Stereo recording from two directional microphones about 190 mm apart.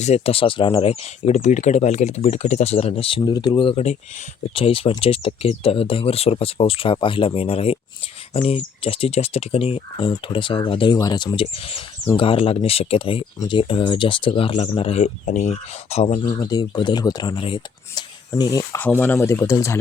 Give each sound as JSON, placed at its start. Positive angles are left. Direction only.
{"t": 0.0, "sound": "speech", "side_deg": 35}